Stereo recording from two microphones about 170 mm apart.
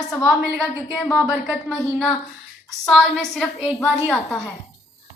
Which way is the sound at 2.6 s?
Centre (ahead or behind).